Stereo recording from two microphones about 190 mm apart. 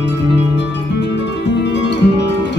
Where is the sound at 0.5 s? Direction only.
65° left (ahead or behind).